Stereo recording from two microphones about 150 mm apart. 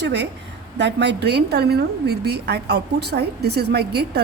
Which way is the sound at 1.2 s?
90° right.